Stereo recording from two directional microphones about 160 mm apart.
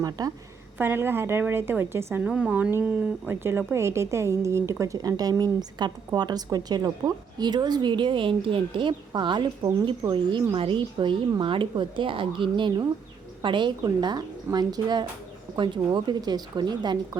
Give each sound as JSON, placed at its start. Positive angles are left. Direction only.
{"t": 0.0, "sound": "a woman's voice", "side_deg": -25}